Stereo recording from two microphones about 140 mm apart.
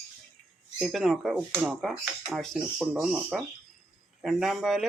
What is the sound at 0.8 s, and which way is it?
Speech, centre (ahead or behind).